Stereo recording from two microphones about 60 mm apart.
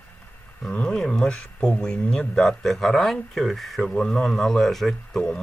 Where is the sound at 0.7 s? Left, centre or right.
Centre.